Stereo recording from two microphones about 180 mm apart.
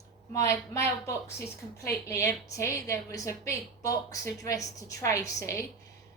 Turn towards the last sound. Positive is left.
turn(degrees=15)  # may be behind; listen again after turning